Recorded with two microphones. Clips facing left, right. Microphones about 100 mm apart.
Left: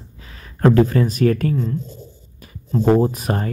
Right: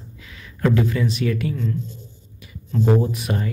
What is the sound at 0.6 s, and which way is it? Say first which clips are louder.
Speech: left 5 dB; 45° left (ahead or behind).